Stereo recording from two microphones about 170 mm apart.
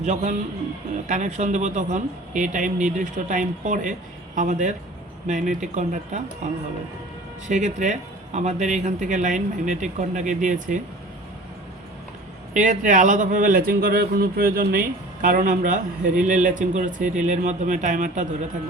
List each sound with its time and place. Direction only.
0.0 s speech: 45° right (ahead or behind)
7.4 s speech: 45° right (ahead or behind)
12.5 s speech: 50° right (ahead or behind)